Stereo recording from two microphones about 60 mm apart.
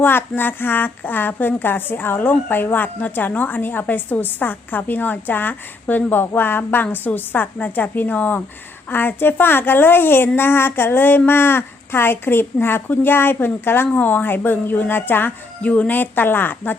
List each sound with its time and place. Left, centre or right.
0.0 s a woman's voice: left
15.6 s a woman's voice: left